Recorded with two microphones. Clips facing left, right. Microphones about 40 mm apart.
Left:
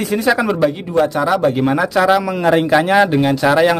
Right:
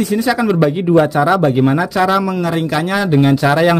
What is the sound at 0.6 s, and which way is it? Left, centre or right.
Speech, centre.